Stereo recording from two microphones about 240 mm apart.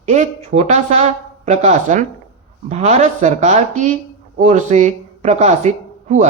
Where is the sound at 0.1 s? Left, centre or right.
Right.